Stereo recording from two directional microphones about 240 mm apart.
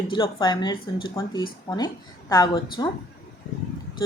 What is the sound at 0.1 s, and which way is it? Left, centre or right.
A woman's voice, centre.